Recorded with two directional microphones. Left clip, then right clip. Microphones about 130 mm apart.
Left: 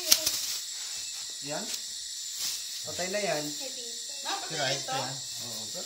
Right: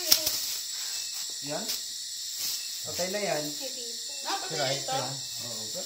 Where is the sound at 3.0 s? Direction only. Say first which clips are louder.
Even; 15° left (ahead or behind).